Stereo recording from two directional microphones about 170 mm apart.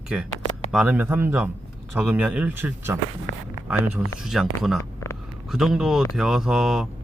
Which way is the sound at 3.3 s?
60° right (ahead or behind).